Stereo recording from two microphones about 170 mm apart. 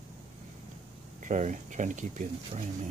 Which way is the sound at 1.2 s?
45° right (ahead or behind).